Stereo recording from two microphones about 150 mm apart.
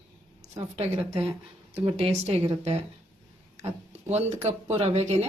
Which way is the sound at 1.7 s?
40° right (ahead or behind).